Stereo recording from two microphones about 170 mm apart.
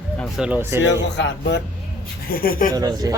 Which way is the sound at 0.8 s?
90° left.